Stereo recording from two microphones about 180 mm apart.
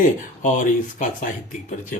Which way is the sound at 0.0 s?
45° left (ahead or behind).